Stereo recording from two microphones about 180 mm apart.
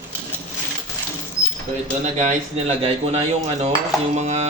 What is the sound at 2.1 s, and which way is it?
Speech, 35° right (ahead or behind).